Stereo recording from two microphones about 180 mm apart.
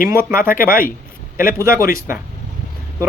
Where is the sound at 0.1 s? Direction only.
15° right (ahead or behind).